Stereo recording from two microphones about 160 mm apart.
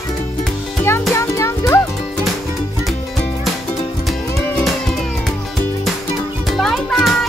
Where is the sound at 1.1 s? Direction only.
20° left (ahead or behind).